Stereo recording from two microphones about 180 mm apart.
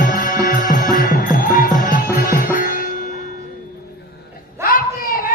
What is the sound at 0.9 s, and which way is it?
Music, 50° left (ahead or behind).